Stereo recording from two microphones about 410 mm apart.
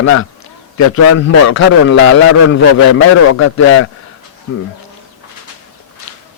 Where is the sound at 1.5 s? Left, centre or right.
Left.